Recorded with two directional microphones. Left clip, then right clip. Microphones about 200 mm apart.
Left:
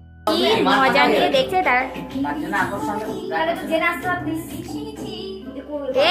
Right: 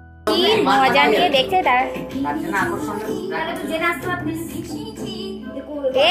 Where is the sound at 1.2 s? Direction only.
Centre (ahead or behind).